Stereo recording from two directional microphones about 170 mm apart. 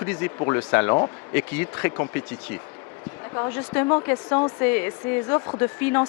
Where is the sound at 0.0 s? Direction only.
10° left (ahead or behind).